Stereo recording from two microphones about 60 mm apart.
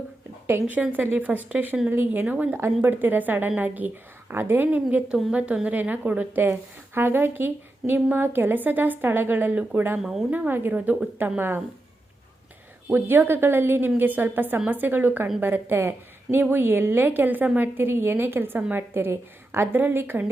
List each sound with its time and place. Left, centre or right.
0.7 s a woman's voice: right
1.9 s speech: right
2.2 s a woman's voice: right
6.5 s speech: right
10.0 s speech: centre
10.2 s speech: right
12.9 s speech: right
19.1 s a woman's voice: right